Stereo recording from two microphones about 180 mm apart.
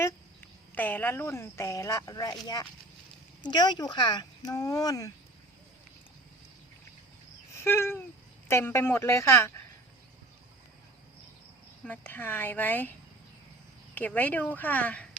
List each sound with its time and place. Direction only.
0.8 s speech: 10° left (ahead or behind)
3.4 s speech: 25° left (ahead or behind)
7.5 s a sound: 15° left (ahead or behind)
8.4 s speech: 15° left (ahead or behind)
11.9 s speech: 10° left (ahead or behind)
13.9 s speech: 10° left (ahead or behind)